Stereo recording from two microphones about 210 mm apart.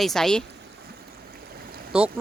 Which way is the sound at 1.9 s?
5° right (ahead or behind).